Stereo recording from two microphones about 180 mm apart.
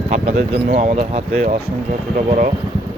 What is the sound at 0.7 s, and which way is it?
Speech, 50° right (ahead or behind).